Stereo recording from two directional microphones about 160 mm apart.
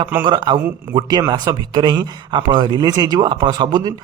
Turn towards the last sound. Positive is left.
turn(degrees=-25)  # may be behind; listen again after turning